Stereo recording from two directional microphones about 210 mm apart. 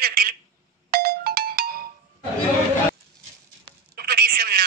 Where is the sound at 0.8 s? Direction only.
45° right (ahead or behind).